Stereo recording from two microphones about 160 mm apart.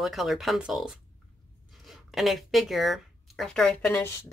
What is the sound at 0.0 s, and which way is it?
Speech, centre (ahead or behind).